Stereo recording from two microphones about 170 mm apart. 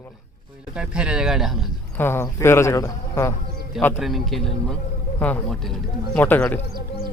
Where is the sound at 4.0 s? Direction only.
Centre (ahead or behind).